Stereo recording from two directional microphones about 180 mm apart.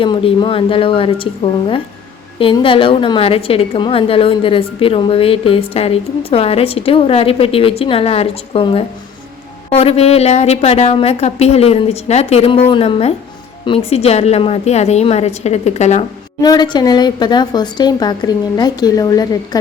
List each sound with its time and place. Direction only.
0.0 s a woman's voice: 30° left (ahead or behind)
16.4 s a woman's voice: 25° left (ahead or behind)